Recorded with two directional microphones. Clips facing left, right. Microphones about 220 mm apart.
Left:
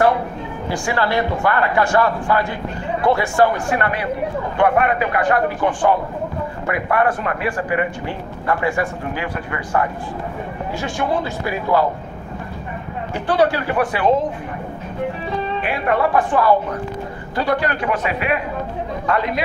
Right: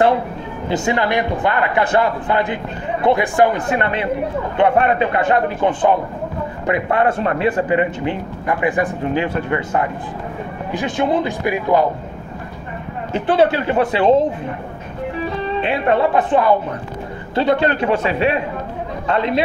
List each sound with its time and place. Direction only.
0.7 s speech: 20° right (ahead or behind)
13.1 s speech: 20° right (ahead or behind)
15.6 s speech: 25° right (ahead or behind)